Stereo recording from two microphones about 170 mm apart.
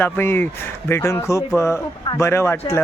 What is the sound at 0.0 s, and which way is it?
Speech, 10° left (ahead or behind).